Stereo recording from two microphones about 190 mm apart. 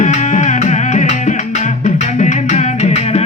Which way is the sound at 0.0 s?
40° left (ahead or behind).